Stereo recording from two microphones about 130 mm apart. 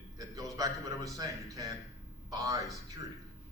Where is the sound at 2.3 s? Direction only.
25° right (ahead or behind).